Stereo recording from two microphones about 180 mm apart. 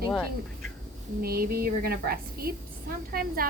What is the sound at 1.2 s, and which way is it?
A woman's voice, 55° right (ahead or behind).